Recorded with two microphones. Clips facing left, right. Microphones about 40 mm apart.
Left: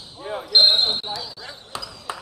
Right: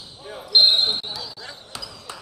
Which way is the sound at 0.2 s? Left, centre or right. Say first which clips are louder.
Left 7 dB; left.